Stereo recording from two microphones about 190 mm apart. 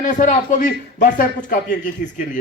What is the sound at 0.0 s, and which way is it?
A man's voice, 40° left (ahead or behind).